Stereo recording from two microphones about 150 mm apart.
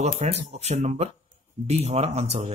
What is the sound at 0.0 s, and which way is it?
Speech, 45° right (ahead or behind).